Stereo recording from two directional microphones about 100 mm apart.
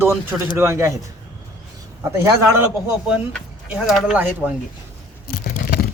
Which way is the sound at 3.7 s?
5° right (ahead or behind).